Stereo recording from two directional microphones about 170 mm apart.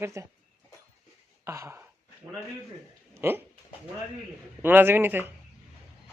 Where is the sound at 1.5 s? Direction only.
15° right (ahead or behind).